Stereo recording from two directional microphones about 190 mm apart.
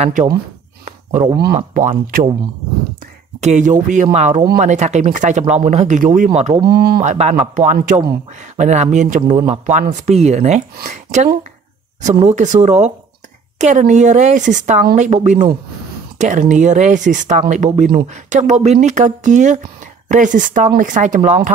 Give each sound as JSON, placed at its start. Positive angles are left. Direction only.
{"t": 0.0, "sound": "a woman's voice", "side_deg": -35}
{"t": 0.8, "sound": "a sound", "side_deg": -40}
{"t": 1.9, "sound": "speech", "side_deg": -50}
{"t": 3.3, "sound": "a woman's voice", "side_deg": -40}
{"t": 6.6, "sound": "speech", "side_deg": -55}
{"t": 7.0, "sound": "a woman's voice", "side_deg": -35}